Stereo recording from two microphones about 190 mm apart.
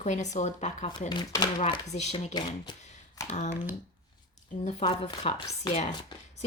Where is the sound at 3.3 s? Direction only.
35° left (ahead or behind).